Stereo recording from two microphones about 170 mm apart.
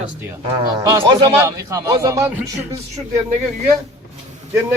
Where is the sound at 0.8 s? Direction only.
25° right (ahead or behind).